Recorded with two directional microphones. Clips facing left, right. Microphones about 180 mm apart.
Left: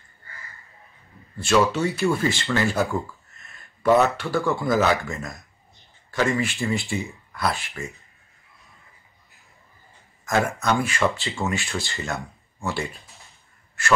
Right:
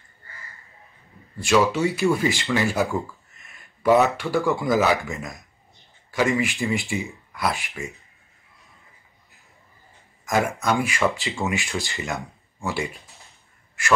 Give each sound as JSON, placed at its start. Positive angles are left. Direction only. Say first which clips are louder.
{"t": 1.4, "sound": "speech", "louder": "right 1 dB", "side_deg": -15}
{"t": 10.2, "sound": "speech", "louder": "even", "side_deg": -15}